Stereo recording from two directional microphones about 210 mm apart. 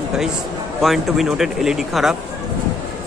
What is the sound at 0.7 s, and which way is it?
Speech, centre (ahead or behind).